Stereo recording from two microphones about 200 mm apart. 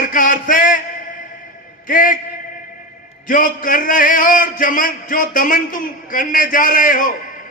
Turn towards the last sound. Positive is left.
turn(degrees=45)  # may be behind; listen again after turning